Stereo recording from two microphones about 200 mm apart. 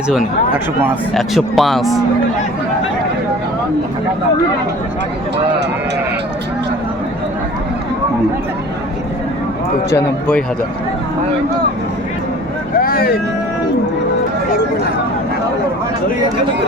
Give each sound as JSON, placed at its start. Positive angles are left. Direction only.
{"t": 1.1, "sound": "speech", "side_deg": 0}
{"t": 9.9, "sound": "speech", "side_deg": 5}
{"t": 12.8, "sound": "vehicle", "side_deg": 50}